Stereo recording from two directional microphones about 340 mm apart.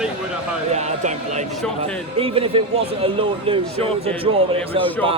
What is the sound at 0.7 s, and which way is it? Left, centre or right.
A man's voice, centre.